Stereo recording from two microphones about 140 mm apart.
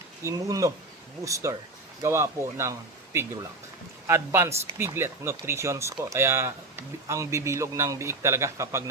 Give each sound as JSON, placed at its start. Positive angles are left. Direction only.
{"t": 0.3, "sound": "speech", "side_deg": -25}